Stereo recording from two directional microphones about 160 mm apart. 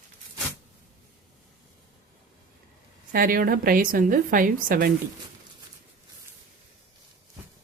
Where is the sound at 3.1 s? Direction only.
65° right (ahead or behind).